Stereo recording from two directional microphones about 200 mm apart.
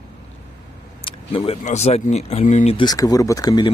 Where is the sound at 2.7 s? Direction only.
20° left (ahead or behind).